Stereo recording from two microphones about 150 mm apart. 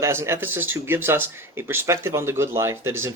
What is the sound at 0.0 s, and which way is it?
Speech, 15° right (ahead or behind).